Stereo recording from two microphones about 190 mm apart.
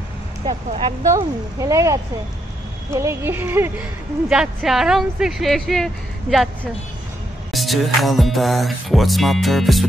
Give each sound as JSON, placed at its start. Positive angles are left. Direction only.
{"t": 0.5, "sound": "speech", "side_deg": -30}
{"t": 1.0, "sound": "a woman's voice", "side_deg": -15}
{"t": 4.3, "sound": "music", "side_deg": -5}